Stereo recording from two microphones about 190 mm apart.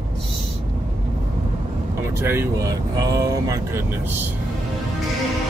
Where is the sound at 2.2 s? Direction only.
10° right (ahead or behind).